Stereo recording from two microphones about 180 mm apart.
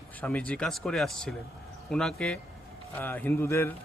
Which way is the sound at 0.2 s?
5° left (ahead or behind).